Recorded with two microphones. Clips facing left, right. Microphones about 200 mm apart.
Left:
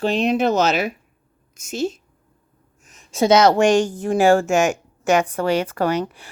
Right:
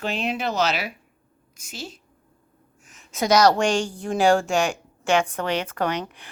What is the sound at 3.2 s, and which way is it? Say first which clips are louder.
Speech: left 4 dB; 25° left (ahead or behind).